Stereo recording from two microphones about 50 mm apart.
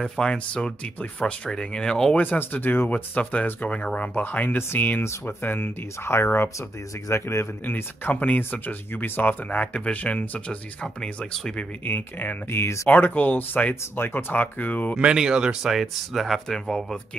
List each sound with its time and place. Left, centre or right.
0.0 s speech: centre
2.2 s speech: left
2.9 s speech: left
5.2 s speech: left
7.1 s a man's voice: left
7.6 s speech: left
9.2 s speech: left
11.8 s speech: left
12.4 s a man's voice: left
12.9 s speech: left
15.1 s speech: centre
15.7 s speech: centre
16.5 s speech: centre